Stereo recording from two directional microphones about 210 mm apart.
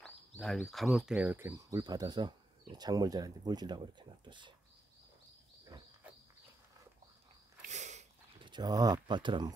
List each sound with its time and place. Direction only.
0.4 s speech: centre (ahead or behind); by 4.6 s 20° right (ahead or behind)
5.7 s bird: 15° right (ahead or behind)
7.6 s sniff: 35° right (ahead or behind)
8.5 s speech: 20° right (ahead or behind)